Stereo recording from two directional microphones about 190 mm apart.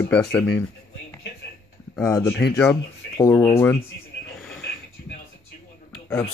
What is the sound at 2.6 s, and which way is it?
Speech, 10° left (ahead or behind).